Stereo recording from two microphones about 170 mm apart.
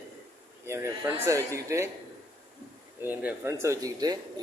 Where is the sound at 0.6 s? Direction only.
15° right (ahead or behind).